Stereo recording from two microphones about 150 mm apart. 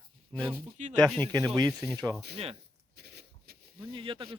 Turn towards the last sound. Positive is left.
turn(degrees=-35)  # may be behind; listen again after turning